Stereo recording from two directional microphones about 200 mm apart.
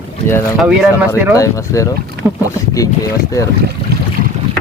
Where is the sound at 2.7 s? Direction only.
15° left (ahead or behind).